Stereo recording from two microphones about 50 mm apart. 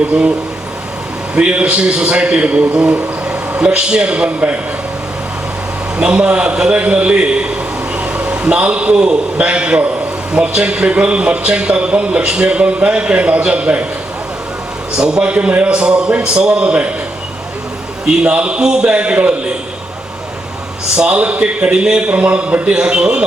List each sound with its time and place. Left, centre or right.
1.4 s speech: right
6.0 s a man's voice: right
14.9 s speech: centre
18.0 s speech: right
20.9 s speech: centre